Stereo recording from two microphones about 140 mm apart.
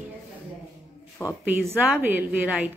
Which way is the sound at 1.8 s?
15° right (ahead or behind).